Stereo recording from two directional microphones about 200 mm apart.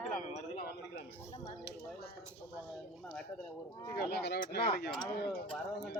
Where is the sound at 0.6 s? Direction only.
50° left (ahead or behind).